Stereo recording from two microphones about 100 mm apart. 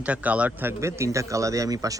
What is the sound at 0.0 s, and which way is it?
Speech, 15° right (ahead or behind).